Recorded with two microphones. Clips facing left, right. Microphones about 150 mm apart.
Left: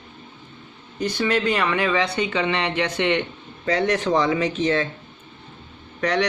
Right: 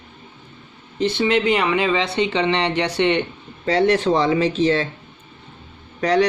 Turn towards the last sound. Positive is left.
turn(degrees=-30)  # may be behind; listen again after turning